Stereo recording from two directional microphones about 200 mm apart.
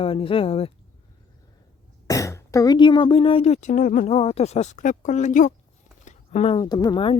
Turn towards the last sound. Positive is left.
turn(degrees=25)  # may be behind; listen again after turning